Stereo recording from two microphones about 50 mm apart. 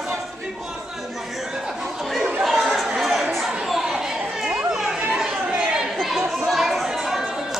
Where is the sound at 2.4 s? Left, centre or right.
Centre.